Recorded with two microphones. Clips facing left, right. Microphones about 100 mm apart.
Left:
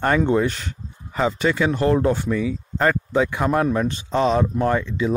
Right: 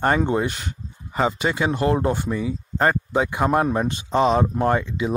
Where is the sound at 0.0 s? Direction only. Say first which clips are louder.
Left 2 dB; 25° right (ahead or behind).